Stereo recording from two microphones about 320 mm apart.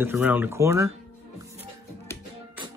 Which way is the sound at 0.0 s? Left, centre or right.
Centre.